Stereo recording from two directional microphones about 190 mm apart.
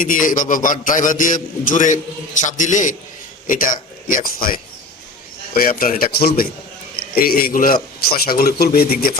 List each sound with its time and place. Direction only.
0.0 s a man's voice: 45° left (ahead or behind)